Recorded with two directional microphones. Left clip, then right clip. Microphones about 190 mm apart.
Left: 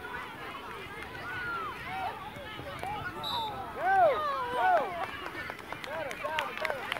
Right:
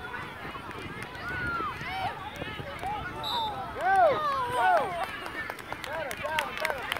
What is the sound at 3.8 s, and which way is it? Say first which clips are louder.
Run: right 2 dB; 55° right (ahead or behind).